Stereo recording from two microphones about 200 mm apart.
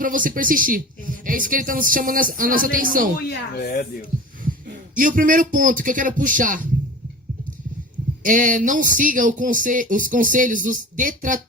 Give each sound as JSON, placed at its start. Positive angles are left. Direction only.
{"t": 0.0, "sound": "speech", "side_deg": -45}
{"t": 3.2, "sound": "speech", "side_deg": 50}
{"t": 4.9, "sound": "speech", "side_deg": -40}
{"t": 8.2, "sound": "speech", "side_deg": -40}